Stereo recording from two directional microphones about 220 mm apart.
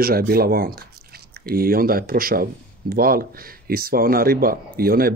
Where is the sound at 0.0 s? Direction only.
45° right (ahead or behind).